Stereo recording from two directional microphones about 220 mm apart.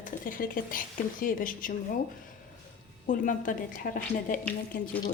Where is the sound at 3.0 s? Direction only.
35° left (ahead or behind).